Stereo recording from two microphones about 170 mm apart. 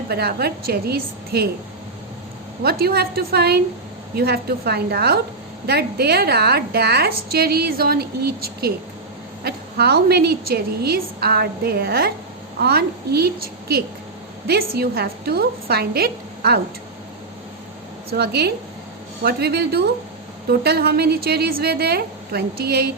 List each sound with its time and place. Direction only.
0.1 s a woman's voice: 70° right (ahead or behind)
2.6 s a woman's voice: 65° right (ahead or behind)
18.1 s a woman's voice: 70° right (ahead or behind)